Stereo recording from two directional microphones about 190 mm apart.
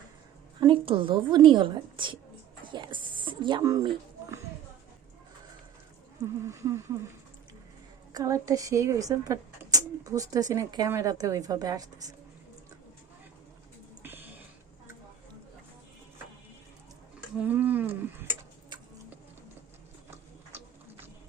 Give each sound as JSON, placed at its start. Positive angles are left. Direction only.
{"t": 0.6, "sound": "a woman's voice", "side_deg": -25}
{"t": 6.5, "sound": "speech", "side_deg": -15}
{"t": 8.1, "sound": "speech", "side_deg": -15}
{"t": 14.0, "sound": "a sound", "side_deg": -10}
{"t": 17.3, "sound": "speech", "side_deg": -10}
{"t": 20.1, "sound": "clip-clop", "side_deg": -10}